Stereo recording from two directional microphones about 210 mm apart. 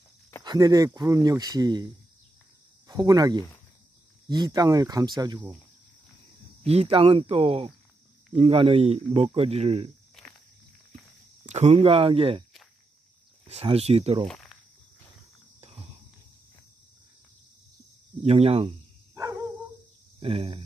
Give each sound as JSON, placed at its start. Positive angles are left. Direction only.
{"t": 0.4, "sound": "speech", "side_deg": -20}
{"t": 2.9, "sound": "speech", "side_deg": -15}
{"t": 6.6, "sound": "speech", "side_deg": -30}
{"t": 11.4, "sound": "speech", "side_deg": -30}
{"t": 13.5, "sound": "speech", "side_deg": -30}
{"t": 14.2, "sound": "snake", "side_deg": 0}
{"t": 18.2, "sound": "speech", "side_deg": -30}
{"t": 20.2, "sound": "speech", "side_deg": -25}